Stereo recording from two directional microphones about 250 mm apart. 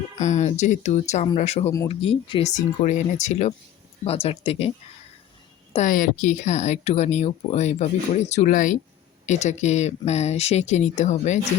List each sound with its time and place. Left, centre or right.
0.2 s speech: left
5.7 s speech: left